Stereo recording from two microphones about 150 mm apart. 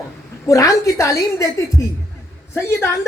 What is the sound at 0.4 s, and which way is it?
A woman's voice, 20° left (ahead or behind).